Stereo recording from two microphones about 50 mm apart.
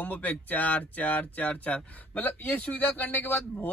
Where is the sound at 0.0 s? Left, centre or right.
Left.